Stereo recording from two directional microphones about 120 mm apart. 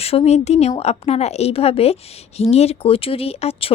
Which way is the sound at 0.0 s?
60° left (ahead or behind).